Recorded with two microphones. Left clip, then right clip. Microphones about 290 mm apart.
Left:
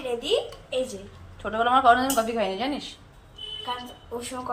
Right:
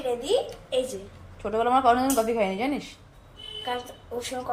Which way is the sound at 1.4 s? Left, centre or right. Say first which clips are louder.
Left 2 dB; right.